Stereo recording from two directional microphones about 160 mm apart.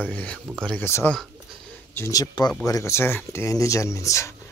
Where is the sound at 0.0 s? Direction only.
10° left (ahead or behind).